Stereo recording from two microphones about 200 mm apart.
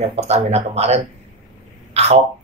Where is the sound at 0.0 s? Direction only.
35° right (ahead or behind).